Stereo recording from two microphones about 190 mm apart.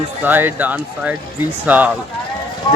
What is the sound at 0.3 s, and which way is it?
Speech, 10° right (ahead or behind).